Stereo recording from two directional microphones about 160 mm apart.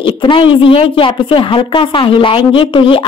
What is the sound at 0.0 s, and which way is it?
A woman's voice, 30° left (ahead or behind).